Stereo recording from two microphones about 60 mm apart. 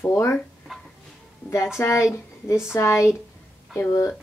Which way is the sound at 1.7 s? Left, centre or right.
Left.